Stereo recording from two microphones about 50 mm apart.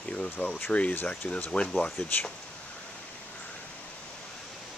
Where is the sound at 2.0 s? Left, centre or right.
Left.